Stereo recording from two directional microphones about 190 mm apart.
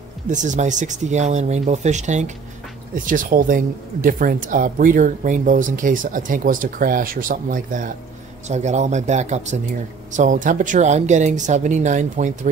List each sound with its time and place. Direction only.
0.3 s speech: 40° right (ahead or behind)